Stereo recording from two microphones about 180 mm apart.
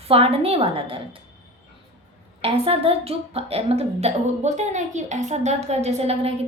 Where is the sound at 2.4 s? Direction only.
30° right (ahead or behind).